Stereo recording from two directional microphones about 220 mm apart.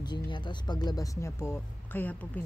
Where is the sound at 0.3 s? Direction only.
20° left (ahead or behind).